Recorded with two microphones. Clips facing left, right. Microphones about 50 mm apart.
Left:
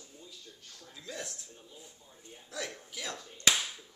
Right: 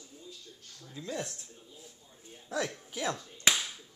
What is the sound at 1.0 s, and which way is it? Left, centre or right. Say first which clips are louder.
Speech: right 5 dB; right.